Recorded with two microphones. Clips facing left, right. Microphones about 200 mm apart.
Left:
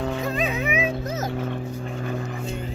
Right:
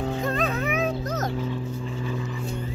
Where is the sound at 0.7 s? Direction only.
70° left (ahead or behind).